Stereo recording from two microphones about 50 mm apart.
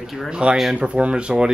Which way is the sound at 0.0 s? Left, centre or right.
Centre.